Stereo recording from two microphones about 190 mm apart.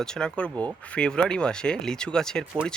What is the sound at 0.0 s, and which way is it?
Speech, 5° left (ahead or behind).